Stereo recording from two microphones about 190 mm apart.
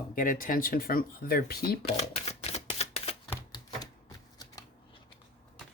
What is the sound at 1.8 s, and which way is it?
Typewriter, 35° left (ahead or behind).